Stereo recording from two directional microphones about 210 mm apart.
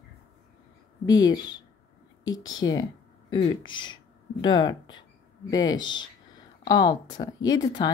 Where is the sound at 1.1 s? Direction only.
20° left (ahead or behind).